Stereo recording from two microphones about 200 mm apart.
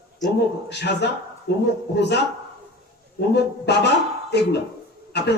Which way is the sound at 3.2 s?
60° left (ahead or behind).